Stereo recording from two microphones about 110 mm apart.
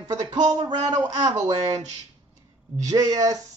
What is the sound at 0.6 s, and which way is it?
Speech, 40° right (ahead or behind).